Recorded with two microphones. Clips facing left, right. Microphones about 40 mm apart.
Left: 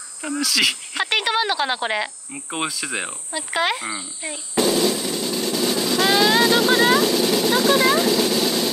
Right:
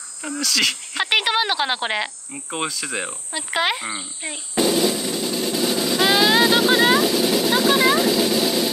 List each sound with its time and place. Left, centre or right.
0.2 s cricket: centre
0.9 s speech: centre
2.3 s cricket: centre
3.3 s speech: centre
3.9 s speech: centre
4.6 s music: centre